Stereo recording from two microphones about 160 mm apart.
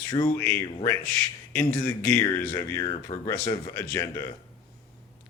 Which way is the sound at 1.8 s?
10° left (ahead or behind).